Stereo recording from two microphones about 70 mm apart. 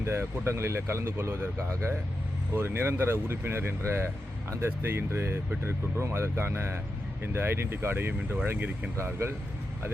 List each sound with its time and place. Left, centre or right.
0.0 s speech: right